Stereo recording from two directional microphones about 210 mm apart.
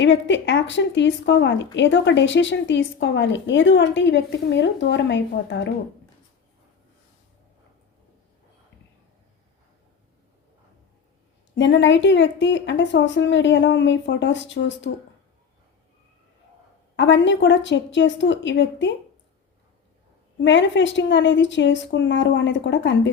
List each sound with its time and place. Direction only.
0.0 s a woman's voice: 60° left (ahead or behind)
11.5 s a woman's voice: 60° left (ahead or behind)
17.0 s a woman's voice: 60° left (ahead or behind)
20.4 s a woman's voice: 60° left (ahead or behind)